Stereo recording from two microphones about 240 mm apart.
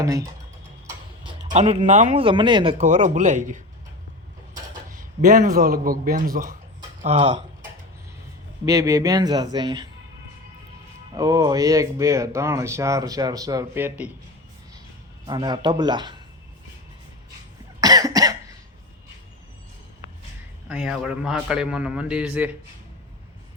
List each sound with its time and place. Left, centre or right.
0.0 s speech: centre
1.5 s speech: right
4.9 s speech: right
8.6 s speech: centre
11.1 s speech: centre
15.3 s speech: centre
17.7 s cough: centre
20.7 s a man's voice: centre